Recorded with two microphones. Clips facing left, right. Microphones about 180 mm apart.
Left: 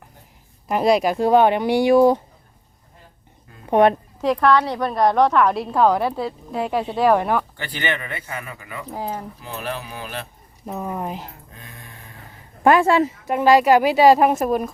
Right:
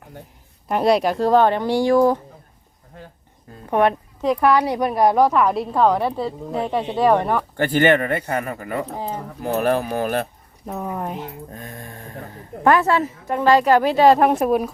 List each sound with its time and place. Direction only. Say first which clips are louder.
0.7 s a woman's voice: even; centre (ahead or behind)
3.7 s a woman's voice: left 3 dB; 20° left (ahead or behind)
4.4 s a woman's voice: right 1 dB; 10° right (ahead or behind)
7.5 s speech: right 11 dB; 50° right (ahead or behind)
10.7 s a woman's voice: even; centre (ahead or behind)
11.5 s speech: right 8 dB; 45° right (ahead or behind)
12.9 s a woman's voice: left 2 dB; 15° left (ahead or behind); by 14.7 s 5° right (ahead or behind)